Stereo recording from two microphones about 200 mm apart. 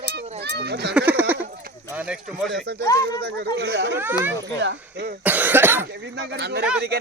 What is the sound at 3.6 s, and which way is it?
Speech, 60° right (ahead or behind).